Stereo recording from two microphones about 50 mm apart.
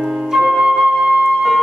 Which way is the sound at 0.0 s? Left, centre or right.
Centre.